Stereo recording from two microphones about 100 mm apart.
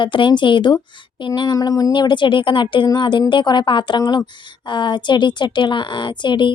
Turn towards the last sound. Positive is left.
turn(degrees=50)  # may be behind; listen again after turning